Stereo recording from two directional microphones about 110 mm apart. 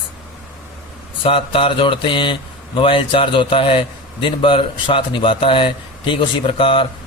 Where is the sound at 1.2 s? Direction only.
55° left (ahead or behind).